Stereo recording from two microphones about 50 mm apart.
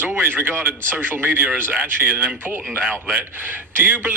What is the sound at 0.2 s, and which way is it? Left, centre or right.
A man's voice, right.